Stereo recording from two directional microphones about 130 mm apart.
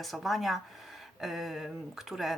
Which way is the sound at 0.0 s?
Centre (ahead or behind).